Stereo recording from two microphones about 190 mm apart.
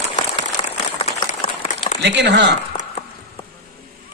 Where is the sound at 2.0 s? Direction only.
65° right (ahead or behind).